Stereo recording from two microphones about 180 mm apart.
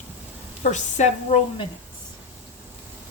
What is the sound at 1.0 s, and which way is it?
Speech, 40° left (ahead or behind).